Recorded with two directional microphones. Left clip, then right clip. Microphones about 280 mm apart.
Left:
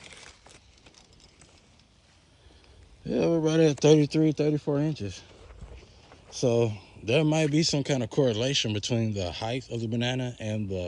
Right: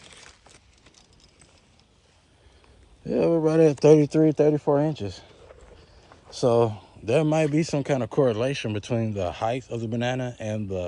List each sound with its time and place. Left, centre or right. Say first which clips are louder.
3.0 s speech: right 4 dB; centre
6.4 s speech: right 4 dB; centre